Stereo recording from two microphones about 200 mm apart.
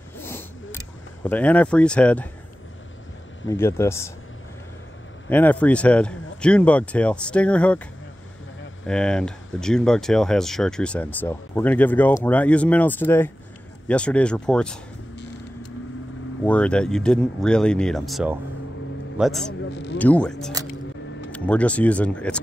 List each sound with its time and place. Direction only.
0.2 s zipper: 10° left (ahead or behind)
1.2 s speech: 10° left (ahead or behind)
3.4 s speech: 10° left (ahead or behind)
5.3 s speech: 10° left (ahead or behind)
16.4 s speech: 5° left (ahead or behind)
19.7 s speech: 60° left (ahead or behind)
20.0 s speech: 5° left (ahead or behind)